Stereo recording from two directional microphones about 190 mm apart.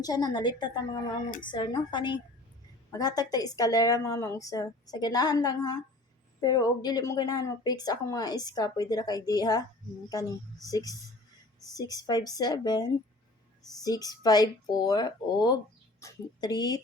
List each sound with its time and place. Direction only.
0.0 s speech: 20° left (ahead or behind)